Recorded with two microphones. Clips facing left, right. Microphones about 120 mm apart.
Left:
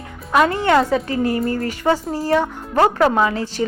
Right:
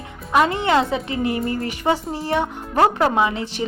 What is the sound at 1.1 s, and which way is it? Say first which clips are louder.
Speech: left 3 dB; 20° right (ahead or behind).